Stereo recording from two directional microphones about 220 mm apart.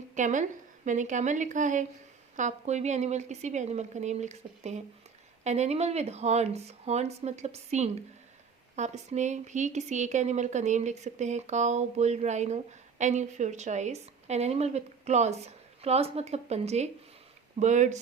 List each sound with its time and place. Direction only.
0.1 s a woman's voice: 35° right (ahead or behind)